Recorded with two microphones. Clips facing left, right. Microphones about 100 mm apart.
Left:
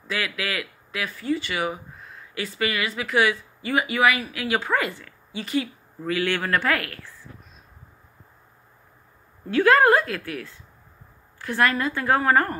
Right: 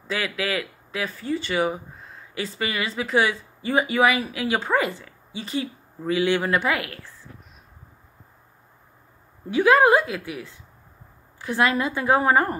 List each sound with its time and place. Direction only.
0.1 s speech: 25° right (ahead or behind)
9.5 s a woman's voice: 15° right (ahead or behind)